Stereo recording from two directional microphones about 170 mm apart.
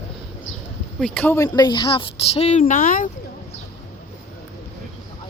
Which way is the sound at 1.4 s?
25° left (ahead or behind).